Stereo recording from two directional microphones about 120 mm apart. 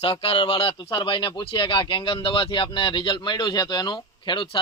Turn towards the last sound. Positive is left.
turn(degrees=45)  # may be behind; listen again after turning